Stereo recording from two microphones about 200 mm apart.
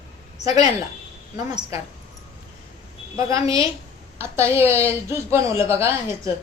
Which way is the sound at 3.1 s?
15° right (ahead or behind).